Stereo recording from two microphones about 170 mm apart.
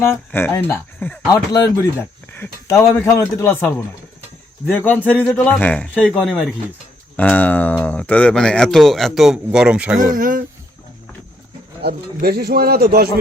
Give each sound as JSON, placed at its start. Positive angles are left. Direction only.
{"t": 0.0, "sound": "speech", "side_deg": 15}
{"t": 1.3, "sound": "speech", "side_deg": 20}
{"t": 7.2, "sound": "speech", "side_deg": 10}
{"t": 10.2, "sound": "a sound", "side_deg": -55}
{"t": 11.8, "sound": "speech", "side_deg": -65}